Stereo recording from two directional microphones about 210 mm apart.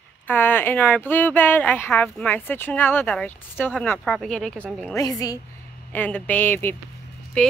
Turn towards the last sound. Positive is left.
turn(degrees=5)  # may be behind; listen again after turning